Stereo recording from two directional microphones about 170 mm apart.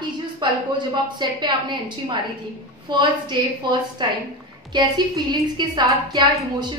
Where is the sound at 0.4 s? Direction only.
25° right (ahead or behind).